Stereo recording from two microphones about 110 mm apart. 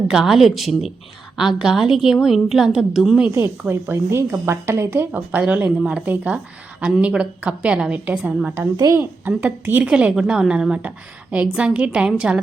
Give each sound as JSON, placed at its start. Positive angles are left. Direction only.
{"t": 0.1, "sound": "a woman's voice", "side_deg": -5}
{"t": 3.7, "sound": "a woman's voice", "side_deg": -20}
{"t": 8.7, "sound": "a woman's voice", "side_deg": -35}
{"t": 9.2, "sound": "a woman's voice", "side_deg": -15}